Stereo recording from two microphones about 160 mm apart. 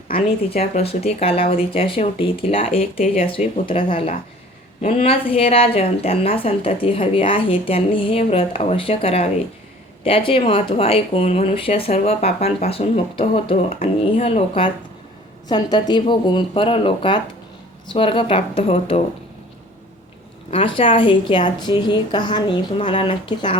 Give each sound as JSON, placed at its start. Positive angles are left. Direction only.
{"t": 0.8, "sound": "a woman's voice", "side_deg": 40}
{"t": 15.4, "sound": "a woman's voice", "side_deg": 25}
{"t": 20.5, "sound": "a woman's voice", "side_deg": 35}